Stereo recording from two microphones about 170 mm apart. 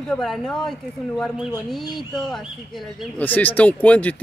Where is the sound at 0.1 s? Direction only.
5° left (ahead or behind).